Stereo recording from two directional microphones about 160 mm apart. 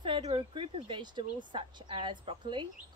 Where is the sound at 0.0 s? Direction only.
30° right (ahead or behind).